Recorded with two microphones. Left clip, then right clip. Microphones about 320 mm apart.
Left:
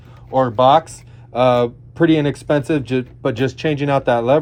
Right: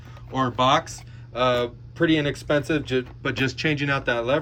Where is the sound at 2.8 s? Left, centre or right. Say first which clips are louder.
Left 5 dB; centre.